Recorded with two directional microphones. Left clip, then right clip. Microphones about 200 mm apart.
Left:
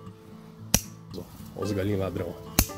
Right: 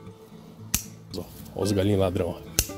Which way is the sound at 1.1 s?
40° right (ahead or behind).